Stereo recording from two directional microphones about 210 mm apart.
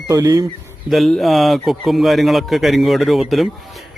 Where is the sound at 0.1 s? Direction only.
15° right (ahead or behind).